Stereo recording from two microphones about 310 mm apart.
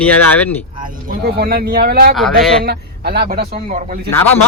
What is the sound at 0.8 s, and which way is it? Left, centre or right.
Speech, right.